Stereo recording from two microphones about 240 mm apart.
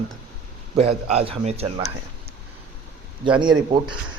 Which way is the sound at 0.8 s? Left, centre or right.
Right.